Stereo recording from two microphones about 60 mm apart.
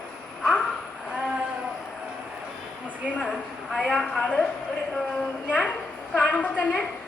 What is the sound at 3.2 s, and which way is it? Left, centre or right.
A woman's voice, centre.